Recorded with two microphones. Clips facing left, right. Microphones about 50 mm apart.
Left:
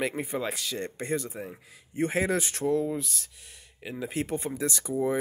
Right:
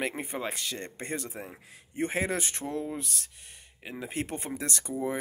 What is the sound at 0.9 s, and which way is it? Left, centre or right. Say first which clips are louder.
Speech: left 5 dB; right.